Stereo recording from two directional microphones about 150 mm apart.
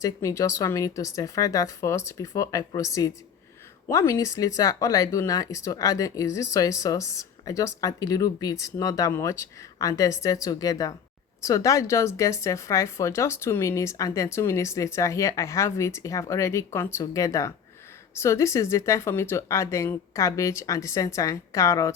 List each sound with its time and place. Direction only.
0.0 s speech: 20° left (ahead or behind)